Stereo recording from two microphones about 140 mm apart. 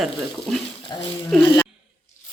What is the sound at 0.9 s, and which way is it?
Speech, 30° left (ahead or behind).